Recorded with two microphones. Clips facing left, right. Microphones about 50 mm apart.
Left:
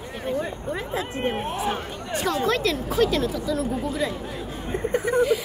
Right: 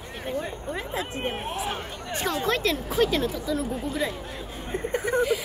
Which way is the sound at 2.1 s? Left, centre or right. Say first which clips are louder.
Left 3 dB; right.